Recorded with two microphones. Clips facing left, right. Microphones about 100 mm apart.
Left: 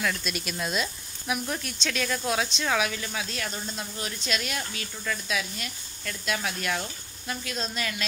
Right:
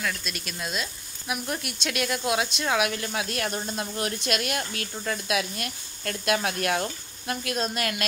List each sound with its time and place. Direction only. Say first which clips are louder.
0.0 s speech: left 2 dB; centre (ahead or behind)
3.4 s speech: right 5 dB; 40° right (ahead or behind)
4.6 s speech: right 3 dB; 35° right (ahead or behind)
5.3 s speech: right 4 dB; 55° right (ahead or behind)